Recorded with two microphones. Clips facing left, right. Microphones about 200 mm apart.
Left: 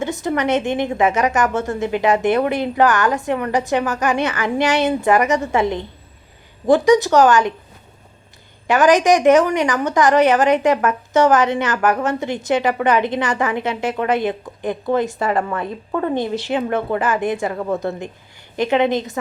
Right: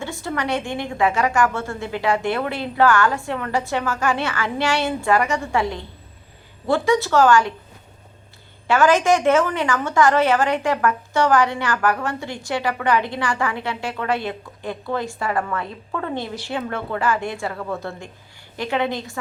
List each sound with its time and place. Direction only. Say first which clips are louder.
0.0 s a woman's voice: left 6 dB; 20° left (ahead or behind)
8.6 s a woman's voice: left 3 dB; 15° left (ahead or behind)